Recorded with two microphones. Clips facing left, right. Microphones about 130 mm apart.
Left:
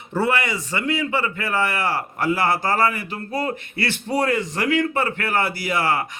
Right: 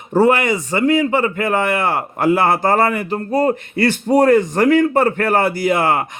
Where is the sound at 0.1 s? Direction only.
45° right (ahead or behind).